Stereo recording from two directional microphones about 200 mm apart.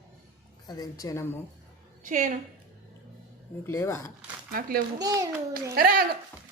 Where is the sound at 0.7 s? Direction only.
20° left (ahead or behind).